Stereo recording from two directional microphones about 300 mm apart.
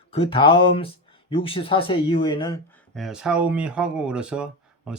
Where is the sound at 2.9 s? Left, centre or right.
Centre.